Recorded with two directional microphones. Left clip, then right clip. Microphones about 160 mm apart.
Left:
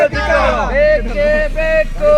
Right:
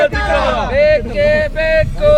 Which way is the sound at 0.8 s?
25° right (ahead or behind).